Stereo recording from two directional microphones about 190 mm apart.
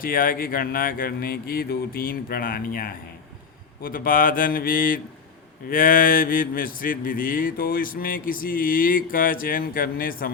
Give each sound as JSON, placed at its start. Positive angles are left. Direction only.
{"t": 0.0, "sound": "speech", "side_deg": 50}